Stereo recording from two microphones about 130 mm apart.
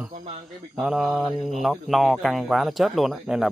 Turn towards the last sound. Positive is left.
turn(degrees=-5)  # may be behind; listen again after turning